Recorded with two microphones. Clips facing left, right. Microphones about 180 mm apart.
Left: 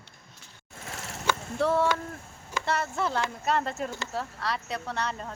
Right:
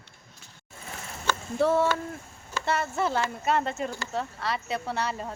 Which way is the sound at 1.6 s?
Centre (ahead or behind).